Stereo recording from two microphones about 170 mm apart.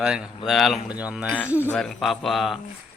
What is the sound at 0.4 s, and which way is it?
Speech, centre (ahead or behind).